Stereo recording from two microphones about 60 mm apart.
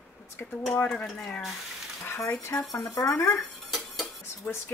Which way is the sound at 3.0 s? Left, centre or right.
Left.